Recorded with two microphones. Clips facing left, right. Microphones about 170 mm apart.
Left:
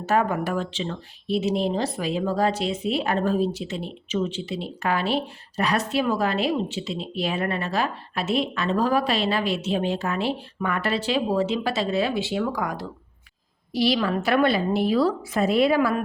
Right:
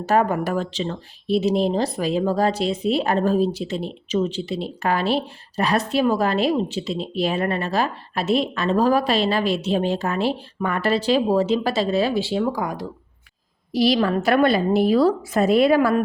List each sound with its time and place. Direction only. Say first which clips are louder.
0.0 s speech: right 3 dB; 35° right (ahead or behind); by 12.9 s 20° right (ahead or behind)
13.7 s a woman's voice: right 4 dB; 45° right (ahead or behind)